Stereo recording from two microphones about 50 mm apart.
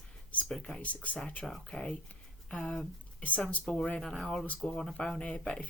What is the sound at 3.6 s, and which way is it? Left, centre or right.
Speech, centre.